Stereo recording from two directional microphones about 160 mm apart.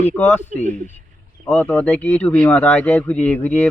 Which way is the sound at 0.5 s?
55° right (ahead or behind).